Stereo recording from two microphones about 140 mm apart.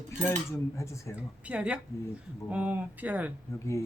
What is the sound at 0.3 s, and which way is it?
Speech, 20° left (ahead or behind).